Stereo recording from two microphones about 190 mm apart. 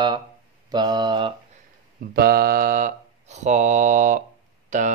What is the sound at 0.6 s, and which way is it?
Mantra, 20° right (ahead or behind).